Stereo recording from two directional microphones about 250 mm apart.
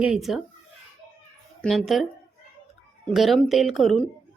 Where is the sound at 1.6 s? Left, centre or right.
Centre.